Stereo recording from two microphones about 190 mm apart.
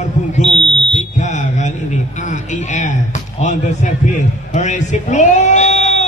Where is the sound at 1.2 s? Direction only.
40° left (ahead or behind).